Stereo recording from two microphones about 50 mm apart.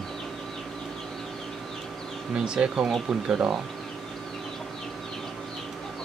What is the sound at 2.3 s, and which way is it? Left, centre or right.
Speech, centre.